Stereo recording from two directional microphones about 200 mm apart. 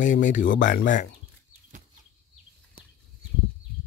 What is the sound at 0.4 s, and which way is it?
Speech, 65° left (ahead or behind).